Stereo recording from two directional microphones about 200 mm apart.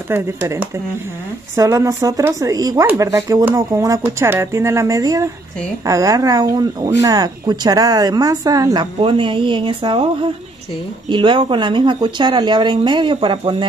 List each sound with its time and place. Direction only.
0.1 s speech: 10° right (ahead or behind)